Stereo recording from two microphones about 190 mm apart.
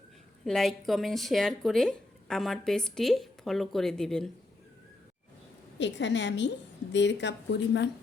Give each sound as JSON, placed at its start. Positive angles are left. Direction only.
{"t": 0.4, "sound": "speech", "side_deg": 0}
{"t": 5.8, "sound": "a woman's voice", "side_deg": 70}